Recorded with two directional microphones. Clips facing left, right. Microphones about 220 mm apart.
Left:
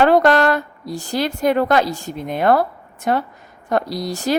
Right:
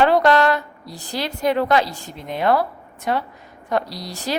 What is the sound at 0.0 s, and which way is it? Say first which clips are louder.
A woman's voice: left 2 dB; 50° left (ahead or behind).